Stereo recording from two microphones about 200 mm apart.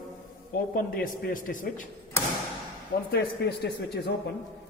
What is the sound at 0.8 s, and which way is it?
Speech, 45° left (ahead or behind).